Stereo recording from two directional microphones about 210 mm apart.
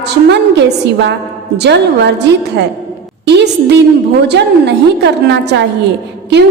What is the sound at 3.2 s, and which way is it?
A woman's voice, 55° right (ahead or behind).